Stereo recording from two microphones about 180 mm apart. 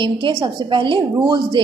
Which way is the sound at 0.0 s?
25° right (ahead or behind).